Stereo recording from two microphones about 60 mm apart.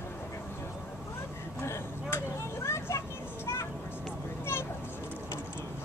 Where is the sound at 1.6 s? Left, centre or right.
Left.